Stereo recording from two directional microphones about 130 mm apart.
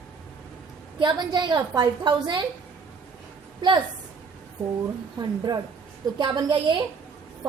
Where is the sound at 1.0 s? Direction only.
35° right (ahead or behind).